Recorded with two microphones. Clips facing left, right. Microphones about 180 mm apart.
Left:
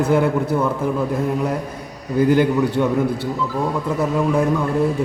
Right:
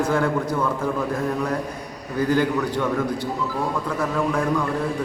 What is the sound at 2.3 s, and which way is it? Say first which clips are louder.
Speech: left 4 dB; 20° left (ahead or behind).